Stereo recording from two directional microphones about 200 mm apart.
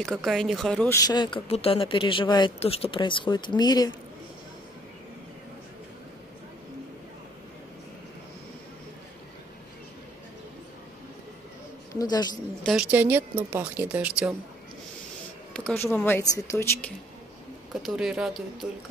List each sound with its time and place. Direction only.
0.0 s speech: centre (ahead or behind); by 3.9 s 20° left (ahead or behind)
12.0 s speech: 20° left (ahead or behind)
12.6 s speech: 5° right (ahead or behind)
15.5 s speech: 10° left (ahead or behind)
17.8 s speech: 5° right (ahead or behind)